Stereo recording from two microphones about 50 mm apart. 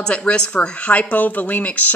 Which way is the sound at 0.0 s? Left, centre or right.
Left.